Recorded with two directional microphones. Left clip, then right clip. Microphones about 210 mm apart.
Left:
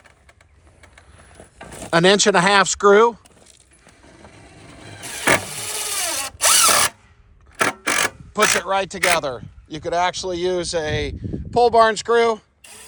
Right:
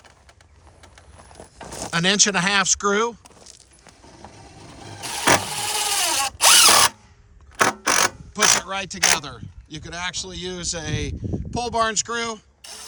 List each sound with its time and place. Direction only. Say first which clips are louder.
1.6 s a sound: right 3 dB; 30° right (ahead or behind)
1.9 s speech: left 5 dB; 5° right (ahead or behind)
4.3 s vehicle: even; 60° right (ahead or behind)
5.4 s vehicle: right 4 dB; 45° right (ahead or behind)
5.8 s drill: right 3 dB; 20° right (ahead or behind)
7.6 s mechanisms: right 1 dB; 60° right (ahead or behind)
8.6 s speech: left 3 dB; centre (ahead or behind)